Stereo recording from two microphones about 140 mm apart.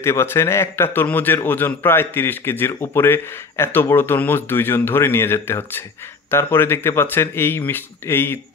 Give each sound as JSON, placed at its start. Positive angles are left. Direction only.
{"t": 0.0, "sound": "a man's voice", "side_deg": 20}